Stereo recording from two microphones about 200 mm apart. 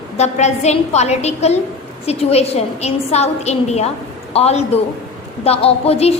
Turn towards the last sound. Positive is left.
turn(degrees=30)  # may be behind; listen again after turning